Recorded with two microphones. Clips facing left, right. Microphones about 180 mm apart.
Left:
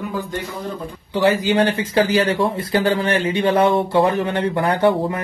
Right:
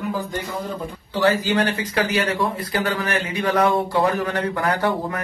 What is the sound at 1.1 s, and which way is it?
A man's voice, 20° left (ahead or behind).